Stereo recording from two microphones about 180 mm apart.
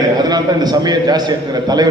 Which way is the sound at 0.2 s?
20° right (ahead or behind).